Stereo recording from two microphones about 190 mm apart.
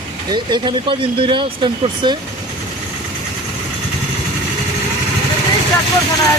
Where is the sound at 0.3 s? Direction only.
25° right (ahead or behind).